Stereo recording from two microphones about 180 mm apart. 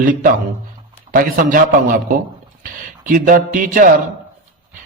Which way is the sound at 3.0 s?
45° right (ahead or behind).